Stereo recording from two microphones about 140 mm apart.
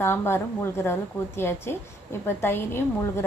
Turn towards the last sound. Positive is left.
turn(degrees=15)  # may be behind; listen again after turning